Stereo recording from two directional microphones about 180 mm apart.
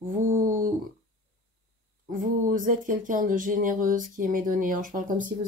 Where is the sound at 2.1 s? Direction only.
50° right (ahead or behind).